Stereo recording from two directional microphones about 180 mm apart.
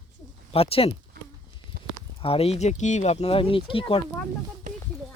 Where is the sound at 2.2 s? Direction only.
35° left (ahead or behind).